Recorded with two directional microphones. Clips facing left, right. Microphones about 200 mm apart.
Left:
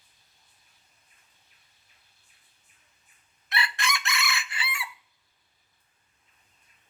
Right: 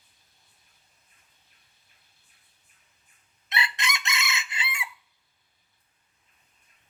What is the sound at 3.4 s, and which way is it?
Chicken, 20° right (ahead or behind).